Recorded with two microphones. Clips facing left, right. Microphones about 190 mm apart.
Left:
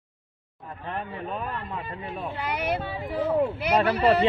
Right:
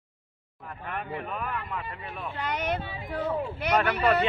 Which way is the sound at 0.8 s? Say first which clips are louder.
Left 1 dB; 30° left (ahead or behind).